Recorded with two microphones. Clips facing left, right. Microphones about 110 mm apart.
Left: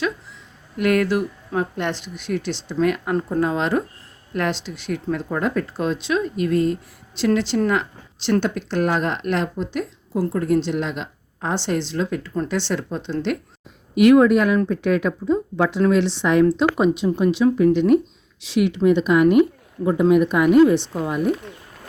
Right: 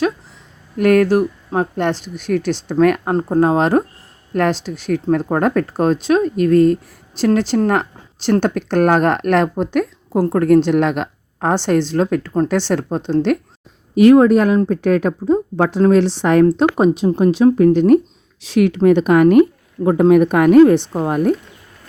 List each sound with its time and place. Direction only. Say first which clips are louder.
0.8 s speech: right 6 dB; 45° right (ahead or behind)
3.1 s speech: right 6 dB; 35° right (ahead or behind)